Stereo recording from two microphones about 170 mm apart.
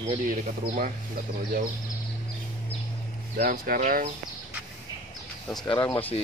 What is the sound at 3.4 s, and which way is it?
Speech, 55° right (ahead or behind).